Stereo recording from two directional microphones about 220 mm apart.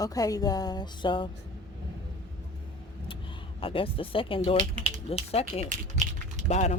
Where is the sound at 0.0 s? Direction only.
15° left (ahead or behind).